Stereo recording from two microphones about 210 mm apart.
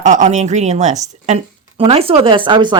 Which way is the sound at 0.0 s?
35° right (ahead or behind).